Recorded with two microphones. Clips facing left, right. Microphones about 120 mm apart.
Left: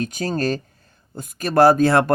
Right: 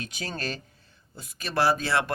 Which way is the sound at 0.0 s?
45° left (ahead or behind).